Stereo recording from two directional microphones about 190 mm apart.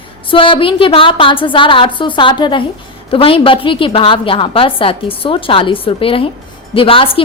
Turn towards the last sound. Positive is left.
turn(degrees=30)  # may be behind; listen again after turning